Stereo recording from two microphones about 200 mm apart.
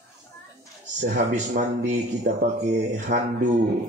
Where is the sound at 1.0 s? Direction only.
35° right (ahead or behind).